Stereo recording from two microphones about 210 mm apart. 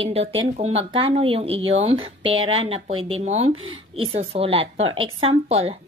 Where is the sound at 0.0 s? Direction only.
30° right (ahead or behind).